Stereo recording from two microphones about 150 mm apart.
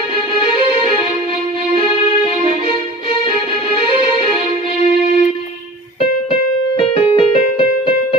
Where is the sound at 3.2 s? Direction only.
35° left (ahead or behind).